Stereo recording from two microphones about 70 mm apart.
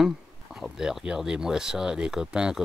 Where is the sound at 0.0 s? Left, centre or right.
Centre.